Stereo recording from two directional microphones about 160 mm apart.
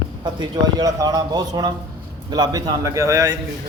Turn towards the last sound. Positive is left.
turn(degrees=-20)  # may be behind; listen again after turning